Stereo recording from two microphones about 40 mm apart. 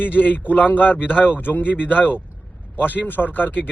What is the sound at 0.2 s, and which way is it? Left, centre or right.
Speech, left.